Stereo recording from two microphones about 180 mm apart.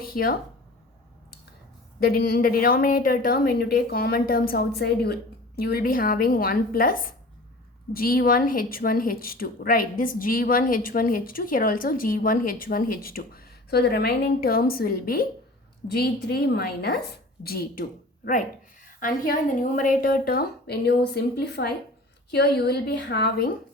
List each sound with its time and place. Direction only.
0.0 s a sound: 55° left (ahead or behind)
2.0 s a woman's voice: 55° left (ahead or behind)
18.9 s speech: 50° left (ahead or behind); by 23.5 s 70° left (ahead or behind)